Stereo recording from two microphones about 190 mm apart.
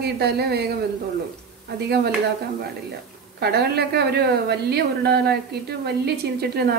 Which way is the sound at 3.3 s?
55° right (ahead or behind).